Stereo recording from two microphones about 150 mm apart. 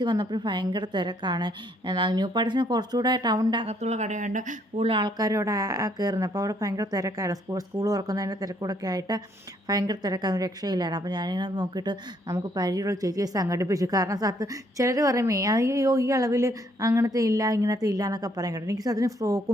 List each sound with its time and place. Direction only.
0.0 s a woman's voice: 30° right (ahead or behind)
3.7 s speech: 45° right (ahead or behind)
4.8 s a woman's voice: 35° right (ahead or behind)